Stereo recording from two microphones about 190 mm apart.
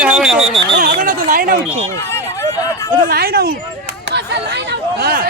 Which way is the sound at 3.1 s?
50° right (ahead or behind).